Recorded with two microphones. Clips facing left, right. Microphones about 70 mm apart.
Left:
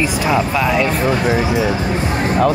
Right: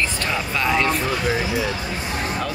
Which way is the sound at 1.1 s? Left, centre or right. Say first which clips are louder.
Left 6 dB; left.